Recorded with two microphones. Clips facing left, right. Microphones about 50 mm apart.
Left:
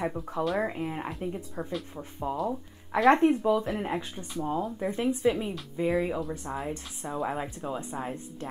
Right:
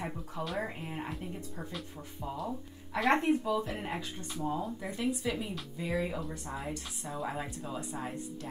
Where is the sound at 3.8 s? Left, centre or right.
Left.